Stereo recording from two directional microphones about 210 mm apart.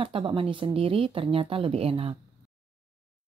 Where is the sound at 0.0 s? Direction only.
25° right (ahead or behind).